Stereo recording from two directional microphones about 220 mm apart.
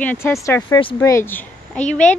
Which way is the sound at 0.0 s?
10° left (ahead or behind).